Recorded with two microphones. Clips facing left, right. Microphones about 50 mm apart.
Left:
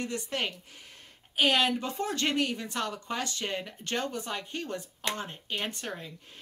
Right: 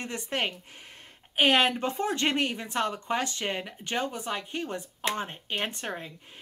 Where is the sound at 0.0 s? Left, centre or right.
Right.